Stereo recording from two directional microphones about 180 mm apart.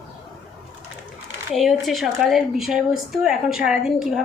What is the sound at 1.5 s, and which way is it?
Speech, centre (ahead or behind).